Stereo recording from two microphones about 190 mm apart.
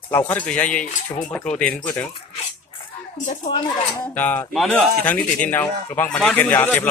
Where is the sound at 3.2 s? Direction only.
40° left (ahead or behind).